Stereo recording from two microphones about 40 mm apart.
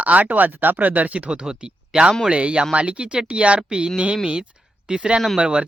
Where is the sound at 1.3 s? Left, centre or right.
Right.